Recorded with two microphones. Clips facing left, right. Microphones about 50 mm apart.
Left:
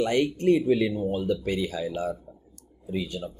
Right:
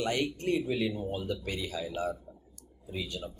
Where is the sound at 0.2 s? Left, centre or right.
Left.